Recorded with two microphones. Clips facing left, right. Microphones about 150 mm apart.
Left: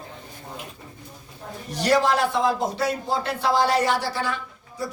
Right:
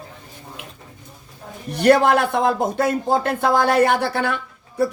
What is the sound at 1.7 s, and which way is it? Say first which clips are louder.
Speech: right 6 dB; 55° right (ahead or behind).